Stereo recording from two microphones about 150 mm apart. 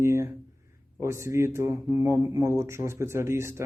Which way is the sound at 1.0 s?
20° right (ahead or behind).